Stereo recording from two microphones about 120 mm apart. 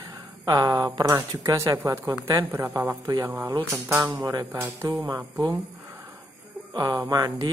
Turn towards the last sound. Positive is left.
turn(degrees=-30)  # may be behind; listen again after turning